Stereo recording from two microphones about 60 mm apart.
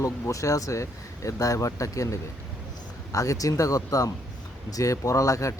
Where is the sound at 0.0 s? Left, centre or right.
Left.